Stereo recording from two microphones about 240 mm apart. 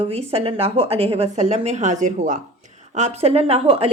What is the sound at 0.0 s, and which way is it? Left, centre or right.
A woman's voice, right.